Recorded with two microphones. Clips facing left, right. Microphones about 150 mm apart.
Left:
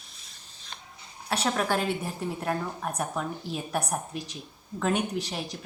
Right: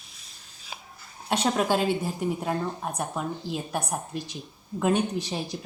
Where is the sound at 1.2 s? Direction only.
20° right (ahead or behind).